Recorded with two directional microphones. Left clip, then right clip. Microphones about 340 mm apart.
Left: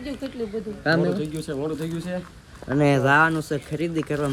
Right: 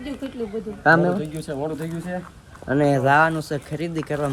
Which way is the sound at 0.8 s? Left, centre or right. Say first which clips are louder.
Right 5 dB; centre.